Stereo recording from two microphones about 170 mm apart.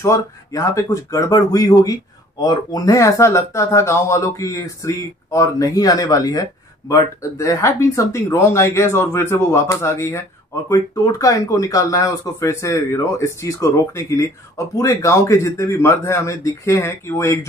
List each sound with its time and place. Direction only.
0.0 s speech: 20° left (ahead or behind)